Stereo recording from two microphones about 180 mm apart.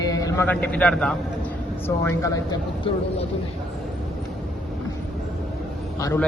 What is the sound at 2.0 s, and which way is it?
Speech, 20° left (ahead or behind).